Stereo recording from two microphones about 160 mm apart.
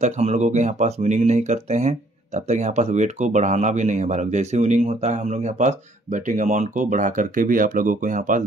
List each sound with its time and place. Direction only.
0.0 s speech: 45° right (ahead or behind)